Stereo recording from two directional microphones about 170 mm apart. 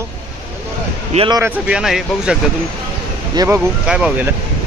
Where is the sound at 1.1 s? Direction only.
30° right (ahead or behind).